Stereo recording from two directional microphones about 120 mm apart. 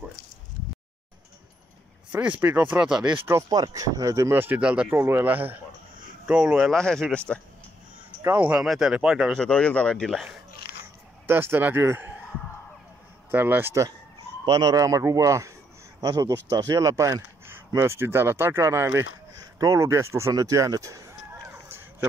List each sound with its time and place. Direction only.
2.1 s speech: 15° right (ahead or behind)
3.3 s speech: 30° right (ahead or behind); by 6.8 s 5° right (ahead or behind)
6.8 s speech: 5° left (ahead or behind)
8.2 s speech: 15° right (ahead or behind)
9.4 s speech: 10° left (ahead or behind)
11.2 s speech: 20° right (ahead or behind)
13.3 s speech: 15° right (ahead or behind)
14.4 s speech: 35° right (ahead or behind)